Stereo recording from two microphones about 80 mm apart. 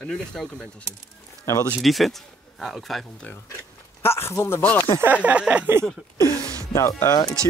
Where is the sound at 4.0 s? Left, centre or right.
Left.